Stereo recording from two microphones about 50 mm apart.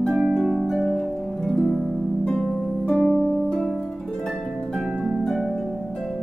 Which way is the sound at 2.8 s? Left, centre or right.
Centre.